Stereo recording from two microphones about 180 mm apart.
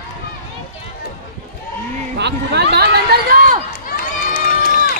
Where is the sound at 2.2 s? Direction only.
70° right (ahead or behind).